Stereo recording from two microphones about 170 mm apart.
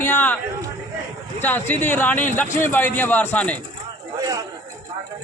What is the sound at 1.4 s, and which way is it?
A man's voice, 10° left (ahead or behind).